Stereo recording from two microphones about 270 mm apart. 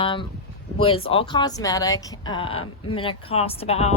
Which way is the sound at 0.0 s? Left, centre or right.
Centre.